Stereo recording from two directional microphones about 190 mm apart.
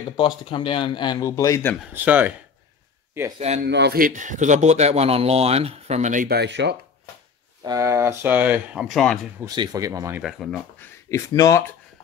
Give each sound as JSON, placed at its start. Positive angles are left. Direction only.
{"t": 0.2, "sound": "speech", "side_deg": 25}
{"t": 2.0, "sound": "speech", "side_deg": -10}
{"t": 3.3, "sound": "speech", "side_deg": -35}
{"t": 3.6, "sound": "speech", "side_deg": -60}
{"t": 7.6, "sound": "speech", "side_deg": -15}
{"t": 9.6, "sound": "speech", "side_deg": -20}
{"t": 10.2, "sound": "speech", "side_deg": 0}
{"t": 11.1, "sound": "speech", "side_deg": 15}